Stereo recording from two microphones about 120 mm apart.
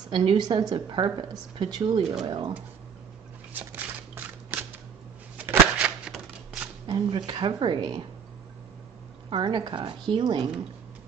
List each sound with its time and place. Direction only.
0.1 s a woman's voice: 40° right (ahead or behind)
3.5 s shuffling cards: 15° right (ahead or behind)
5.4 s a sound: 15° right (ahead or behind)
6.9 s a woman's voice: 45° right (ahead or behind)
9.3 s a woman's voice: 40° right (ahead or behind)